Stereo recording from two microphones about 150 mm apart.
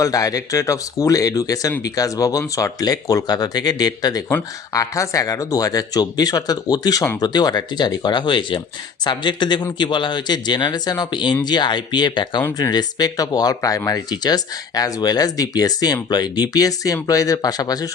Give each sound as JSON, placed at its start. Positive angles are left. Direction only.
{"t": 0.0, "sound": "speech", "side_deg": 25}